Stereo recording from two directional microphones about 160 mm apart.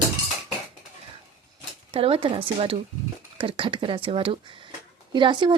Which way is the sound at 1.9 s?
35° right (ahead or behind).